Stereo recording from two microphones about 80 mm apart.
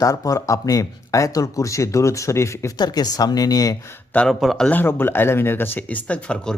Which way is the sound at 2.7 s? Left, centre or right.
Left.